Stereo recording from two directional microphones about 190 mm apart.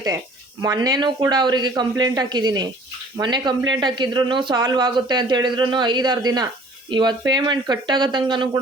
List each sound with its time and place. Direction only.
0.6 s speech: 20° right (ahead or behind)